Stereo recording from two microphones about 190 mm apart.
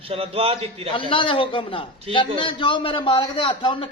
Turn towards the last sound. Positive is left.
turn(degrees=25)  # may be behind; listen again after turning